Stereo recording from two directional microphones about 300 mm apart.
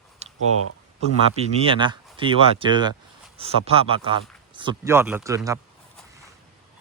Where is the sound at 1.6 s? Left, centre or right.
Centre.